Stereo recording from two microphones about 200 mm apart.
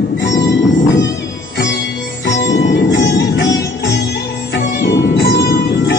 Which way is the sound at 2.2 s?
65° left (ahead or behind).